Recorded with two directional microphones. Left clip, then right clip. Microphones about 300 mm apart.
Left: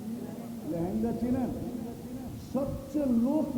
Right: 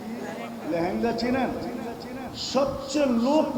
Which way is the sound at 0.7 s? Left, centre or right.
Centre.